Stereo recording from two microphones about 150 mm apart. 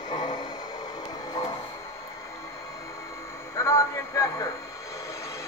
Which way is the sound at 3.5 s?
20° left (ahead or behind).